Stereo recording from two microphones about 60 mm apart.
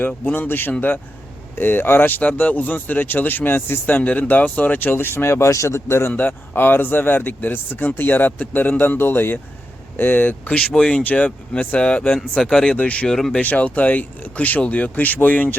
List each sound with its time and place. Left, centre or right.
0.3 s speech: left; by 12.7 s centre
12.7 s speech: left
13.1 s speech: centre
13.3 s speech: left